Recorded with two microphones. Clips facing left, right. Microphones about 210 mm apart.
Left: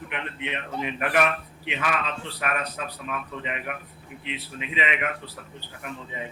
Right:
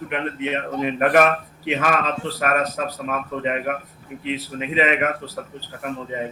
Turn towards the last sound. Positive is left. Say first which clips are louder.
# right 8 dB
turn(degrees=-45)  # may be behind; listen again after turning